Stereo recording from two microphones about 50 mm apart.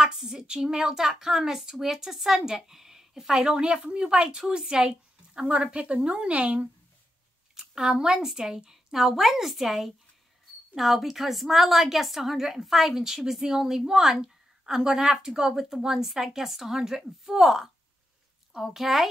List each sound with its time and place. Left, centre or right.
0.0 s a woman's voice: centre; by 6.7 s right
7.5 s a woman's voice: centre